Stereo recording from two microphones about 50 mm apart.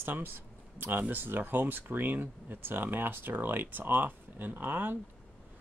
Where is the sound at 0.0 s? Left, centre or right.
Right.